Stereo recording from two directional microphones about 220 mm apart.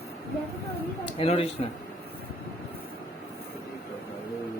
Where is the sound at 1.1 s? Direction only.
25° left (ahead or behind).